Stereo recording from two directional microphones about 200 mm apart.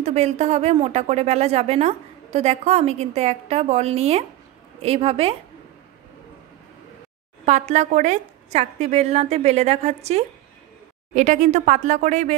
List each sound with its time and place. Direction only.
0.0 s a woman's voice: 35° right (ahead or behind)
7.4 s speech: 35° right (ahead or behind)